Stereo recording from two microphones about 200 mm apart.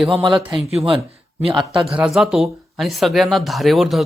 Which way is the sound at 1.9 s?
5° right (ahead or behind).